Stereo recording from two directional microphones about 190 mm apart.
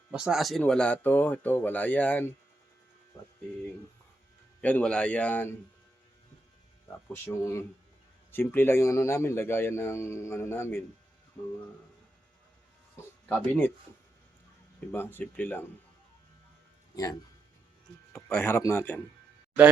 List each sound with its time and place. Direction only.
0.1 s a man's voice: centre (ahead or behind)
4.6 s a man's voice: 5° left (ahead or behind)
7.1 s a man's voice: 15° left (ahead or behind)
13.2 s speech: 5° left (ahead or behind)
14.9 s a man's voice: 10° left (ahead or behind)
16.9 s a man's voice: 20° left (ahead or behind)